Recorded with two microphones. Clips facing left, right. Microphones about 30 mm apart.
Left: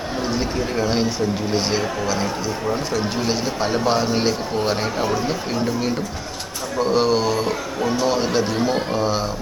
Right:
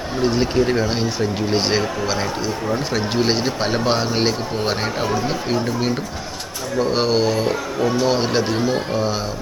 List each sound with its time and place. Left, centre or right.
0.2 s speech: right
1.5 s speech: right
3.2 s speech: right; by 5.0 s centre
5.0 s speech: centre
6.9 s speech: centre
8.1 s speech: centre
8.6 s speech: centre